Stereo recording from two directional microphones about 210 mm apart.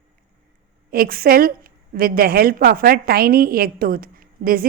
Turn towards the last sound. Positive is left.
turn(degrees=-45)  # may be behind; listen again after turning